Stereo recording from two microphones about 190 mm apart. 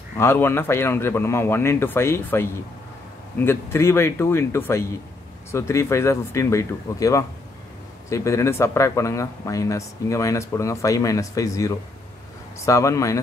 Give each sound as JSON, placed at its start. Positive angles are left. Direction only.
{"t": 0.2, "sound": "speech", "side_deg": 10}